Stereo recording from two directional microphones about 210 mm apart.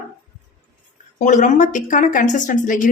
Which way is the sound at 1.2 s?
35° left (ahead or behind).